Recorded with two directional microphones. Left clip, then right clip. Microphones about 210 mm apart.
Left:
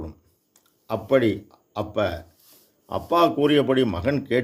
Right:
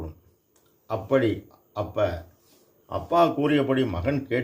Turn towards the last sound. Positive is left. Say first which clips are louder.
# left 3 dB
turn(degrees=40)  # may be behind; listen again after turning